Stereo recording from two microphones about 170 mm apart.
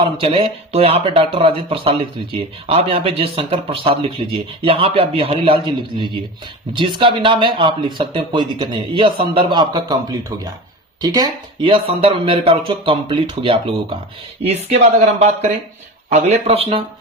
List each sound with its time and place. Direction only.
0.0 s speech: 35° right (ahead or behind)